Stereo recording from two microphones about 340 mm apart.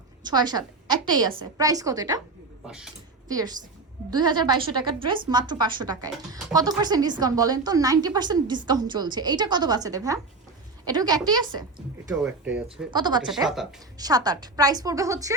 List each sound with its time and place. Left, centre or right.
0.2 s a woman's voice: centre
12.6 s a woman's voice: centre
13.2 s a woman's voice: centre